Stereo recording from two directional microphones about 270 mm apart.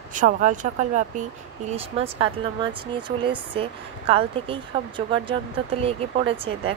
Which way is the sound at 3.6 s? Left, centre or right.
Right.